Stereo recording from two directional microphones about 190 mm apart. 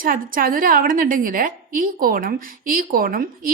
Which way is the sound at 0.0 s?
45° right (ahead or behind).